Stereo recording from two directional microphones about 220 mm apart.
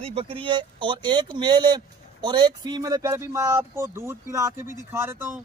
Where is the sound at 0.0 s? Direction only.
25° right (ahead or behind).